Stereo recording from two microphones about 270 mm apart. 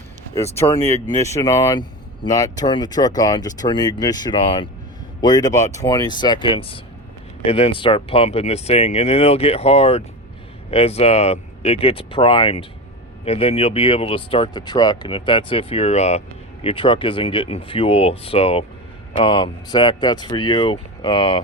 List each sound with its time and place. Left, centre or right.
0.5 s speech: centre